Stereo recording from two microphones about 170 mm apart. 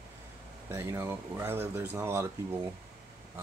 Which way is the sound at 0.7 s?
15° right (ahead or behind).